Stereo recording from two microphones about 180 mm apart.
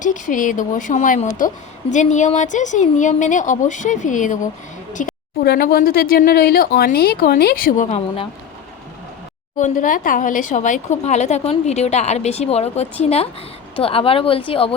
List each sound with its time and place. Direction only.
0.0 s speech: 45° left (ahead or behind)
9.6 s speech: 45° left (ahead or behind); by 14.7 s 30° left (ahead or behind)